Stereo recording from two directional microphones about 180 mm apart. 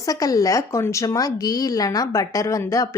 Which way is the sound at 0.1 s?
20° left (ahead or behind).